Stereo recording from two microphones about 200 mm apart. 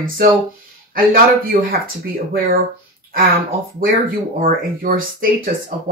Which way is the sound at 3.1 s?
45° right (ahead or behind).